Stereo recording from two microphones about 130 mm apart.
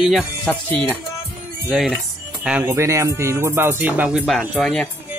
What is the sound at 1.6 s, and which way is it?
Speech, 5° right (ahead or behind).